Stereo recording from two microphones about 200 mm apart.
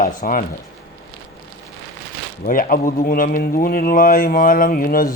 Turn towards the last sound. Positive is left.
turn(degrees=45)  # may be behind; listen again after turning